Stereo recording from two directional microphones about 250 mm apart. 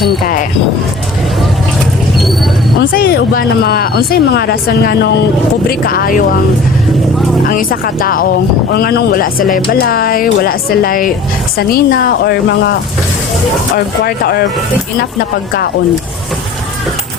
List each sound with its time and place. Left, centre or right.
2.1 s a sound: centre
2.9 s speech: left
7.5 s speech: left
13.7 s speech: left